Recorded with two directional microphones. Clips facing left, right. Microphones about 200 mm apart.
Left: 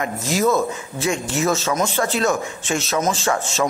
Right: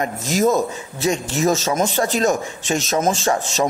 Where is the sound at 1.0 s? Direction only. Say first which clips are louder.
Right 2 dB; 35° right (ahead or behind).